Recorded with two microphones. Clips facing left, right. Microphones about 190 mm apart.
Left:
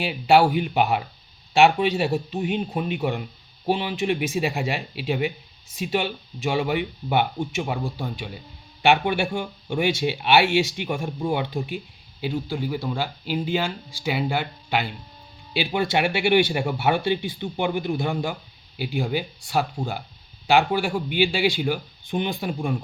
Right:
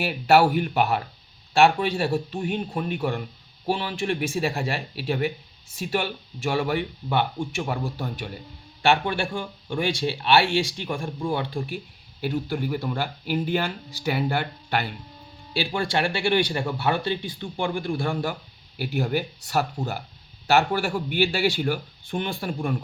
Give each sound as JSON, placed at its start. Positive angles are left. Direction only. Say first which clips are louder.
{"t": 0.0, "sound": "speech", "louder": "left 1 dB", "side_deg": 15}
{"t": 2.1, "sound": "speech", "louder": "left 1 dB", "side_deg": 0}
{"t": 3.0, "sound": "speech", "louder": "left 1 dB", "side_deg": 20}
{"t": 10.8, "sound": "speech", "louder": "left 2 dB", "side_deg": 10}
{"t": 11.0, "sound": "speech", "louder": "left 1 dB", "side_deg": 20}
{"t": 12.2, "sound": "speech", "louder": "even", "side_deg": 10}